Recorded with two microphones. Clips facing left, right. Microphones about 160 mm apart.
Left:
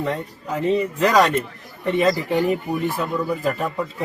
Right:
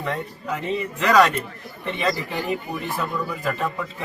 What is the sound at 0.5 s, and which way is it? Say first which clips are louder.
Speech: left 6 dB; 40° left (ahead or behind).